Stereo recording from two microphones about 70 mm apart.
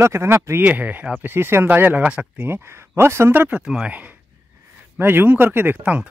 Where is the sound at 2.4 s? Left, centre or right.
Right.